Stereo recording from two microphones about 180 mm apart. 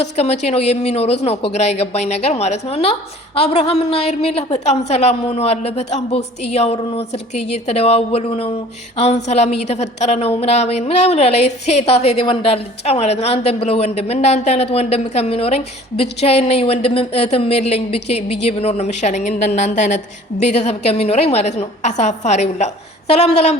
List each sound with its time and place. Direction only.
0.0 s a woman's voice: 35° left (ahead or behind)